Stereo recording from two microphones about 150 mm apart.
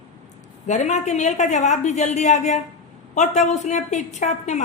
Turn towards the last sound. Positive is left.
turn(degrees=50)  # may be behind; listen again after turning